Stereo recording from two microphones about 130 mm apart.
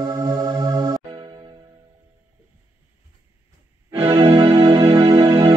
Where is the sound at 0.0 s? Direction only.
30° right (ahead or behind).